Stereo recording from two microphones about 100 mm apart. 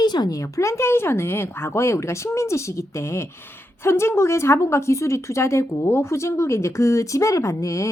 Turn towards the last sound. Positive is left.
turn(degrees=30)  # may be behind; listen again after turning